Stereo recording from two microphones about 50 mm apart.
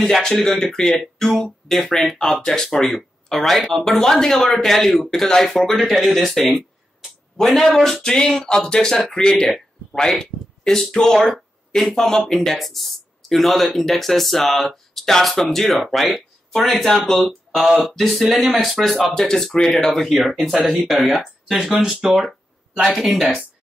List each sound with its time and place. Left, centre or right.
0.0 s speech: centre
4.6 s speech: centre